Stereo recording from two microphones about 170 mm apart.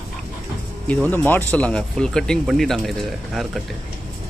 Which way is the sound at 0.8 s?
10° left (ahead or behind).